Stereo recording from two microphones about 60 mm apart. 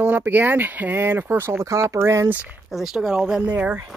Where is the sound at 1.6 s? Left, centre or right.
Right.